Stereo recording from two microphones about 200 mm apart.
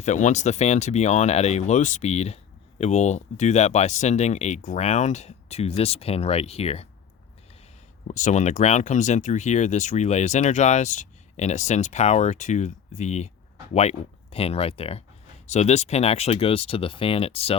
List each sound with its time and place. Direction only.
0.0 s speech: 35° left (ahead or behind)
8.0 s speech: 35° left (ahead or behind)